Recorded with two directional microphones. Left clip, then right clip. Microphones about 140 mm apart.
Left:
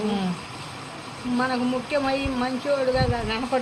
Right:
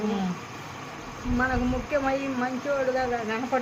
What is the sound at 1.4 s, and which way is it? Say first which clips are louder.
Speech: left 2 dB; 25° left (ahead or behind).